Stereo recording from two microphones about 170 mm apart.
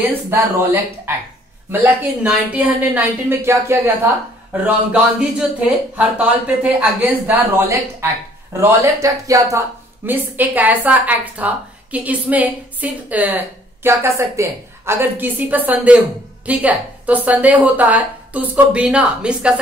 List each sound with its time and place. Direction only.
0.3 s speech: 15° right (ahead or behind)